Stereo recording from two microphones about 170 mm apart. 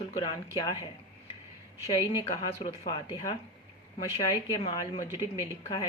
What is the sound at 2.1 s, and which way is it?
A woman's voice, 25° left (ahead or behind).